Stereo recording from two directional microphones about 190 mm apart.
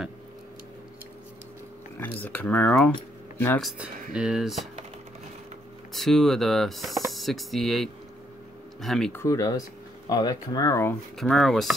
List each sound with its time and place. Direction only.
2.0 s speech: 10° left (ahead or behind)
3.6 s speech: 5° right (ahead or behind)
5.9 s speech: centre (ahead or behind)
9.2 s speech: 15° left (ahead or behind)
11.1 s speech: centre (ahead or behind)